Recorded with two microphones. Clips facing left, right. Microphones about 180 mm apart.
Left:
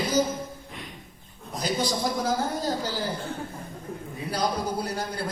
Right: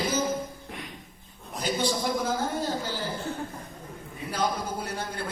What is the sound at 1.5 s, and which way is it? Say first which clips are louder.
Speech: even; 35° left (ahead or behind).